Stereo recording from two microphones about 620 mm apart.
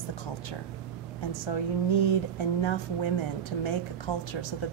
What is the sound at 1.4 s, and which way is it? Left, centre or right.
Speech, left.